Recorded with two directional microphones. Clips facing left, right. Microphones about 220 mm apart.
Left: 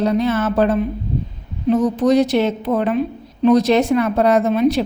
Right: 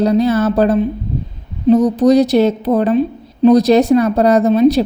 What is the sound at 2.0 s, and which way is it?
A woman's voice, 40° right (ahead or behind).